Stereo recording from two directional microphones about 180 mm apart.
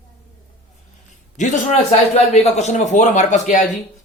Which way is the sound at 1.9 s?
35° left (ahead or behind).